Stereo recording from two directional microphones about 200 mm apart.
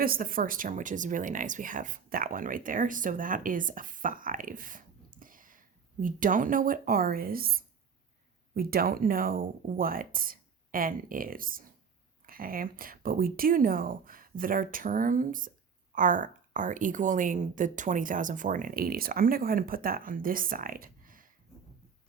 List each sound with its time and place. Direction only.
0.0 s speech: 45° right (ahead or behind)